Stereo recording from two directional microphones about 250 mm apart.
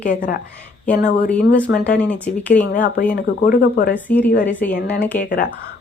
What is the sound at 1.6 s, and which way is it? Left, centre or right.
Speech, left.